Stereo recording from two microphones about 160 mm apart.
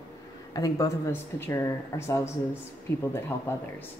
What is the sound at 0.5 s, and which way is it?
Speech, 25° left (ahead or behind).